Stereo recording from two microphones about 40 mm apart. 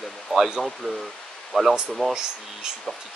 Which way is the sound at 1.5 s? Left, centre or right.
Centre.